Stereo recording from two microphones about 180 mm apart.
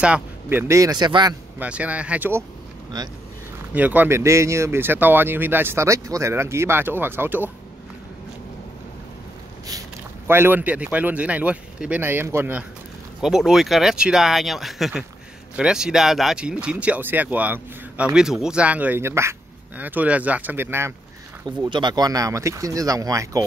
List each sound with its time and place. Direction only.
0.0 s speech: 10° right (ahead or behind)
1.6 s speech: 10° right (ahead or behind)
2.9 s speech: 20° right (ahead or behind)
3.7 s speech: 10° right (ahead or behind)
9.7 s speech: 15° right (ahead or behind)
21.6 s speech: 25° right (ahead or behind)